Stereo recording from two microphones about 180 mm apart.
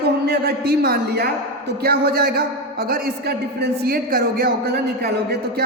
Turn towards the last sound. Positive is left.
turn(degrees=-60)  # may be behind; listen again after turning